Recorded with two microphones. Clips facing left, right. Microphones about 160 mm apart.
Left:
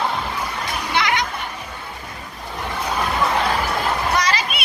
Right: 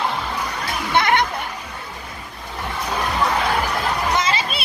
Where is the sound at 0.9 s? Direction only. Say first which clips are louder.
Right 4 dB; 55° right (ahead or behind).